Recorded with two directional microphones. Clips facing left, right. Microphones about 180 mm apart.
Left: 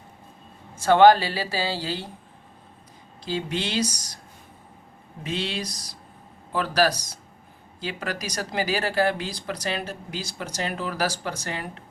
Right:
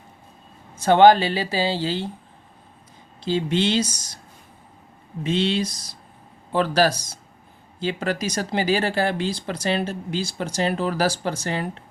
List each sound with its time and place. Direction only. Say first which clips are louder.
0.8 s speech: right 2 dB; 20° right (ahead or behind)
3.2 s speech: right 7 dB; 25° right (ahead or behind)
5.2 s speech: right 7 dB; 25° right (ahead or behind)